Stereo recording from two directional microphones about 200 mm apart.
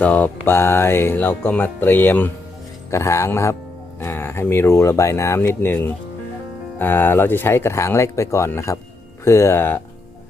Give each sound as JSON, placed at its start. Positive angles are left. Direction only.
{"t": 0.0, "sound": "speech", "side_deg": 10}